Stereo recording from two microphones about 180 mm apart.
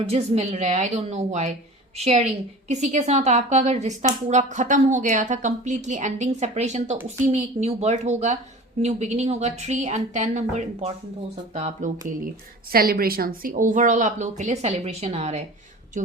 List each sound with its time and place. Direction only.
0.1 s a woman's voice: 35° right (ahead or behind)
12.7 s speech: 55° right (ahead or behind); by 15.4 s 35° right (ahead or behind)